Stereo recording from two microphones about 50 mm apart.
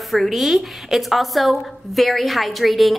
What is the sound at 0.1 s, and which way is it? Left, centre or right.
A woman's voice, centre.